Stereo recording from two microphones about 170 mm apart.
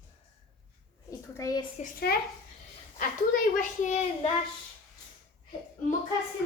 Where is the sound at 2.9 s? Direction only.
50° left (ahead or behind).